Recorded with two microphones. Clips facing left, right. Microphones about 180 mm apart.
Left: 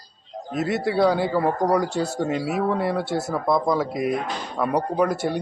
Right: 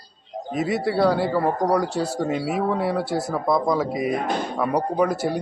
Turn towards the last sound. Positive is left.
turn(degrees=-5)  # may be behind; listen again after turning